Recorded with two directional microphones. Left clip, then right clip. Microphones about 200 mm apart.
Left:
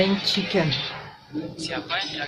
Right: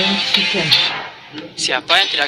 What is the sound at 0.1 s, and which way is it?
Speech, 45° right (ahead or behind).